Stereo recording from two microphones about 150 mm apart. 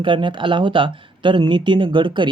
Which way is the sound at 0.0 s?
35° right (ahead or behind).